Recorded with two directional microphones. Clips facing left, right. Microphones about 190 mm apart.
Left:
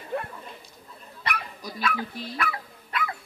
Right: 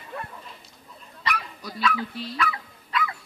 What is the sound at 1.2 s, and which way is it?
Dog, 55° left (ahead or behind).